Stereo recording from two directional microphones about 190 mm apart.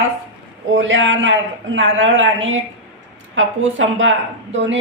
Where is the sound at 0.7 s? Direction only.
75° right (ahead or behind).